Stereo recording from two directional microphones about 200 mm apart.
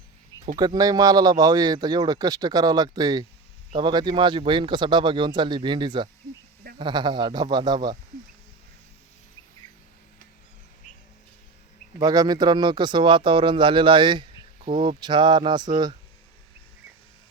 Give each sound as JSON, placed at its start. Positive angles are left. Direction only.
{"t": 0.4, "sound": "speech", "side_deg": -20}
{"t": 11.9, "sound": "speech", "side_deg": -20}